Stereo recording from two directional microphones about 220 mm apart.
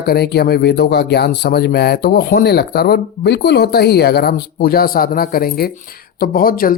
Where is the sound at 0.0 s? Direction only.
45° left (ahead or behind).